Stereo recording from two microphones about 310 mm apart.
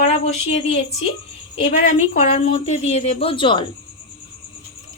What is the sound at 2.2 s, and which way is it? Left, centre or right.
A woman's voice, centre.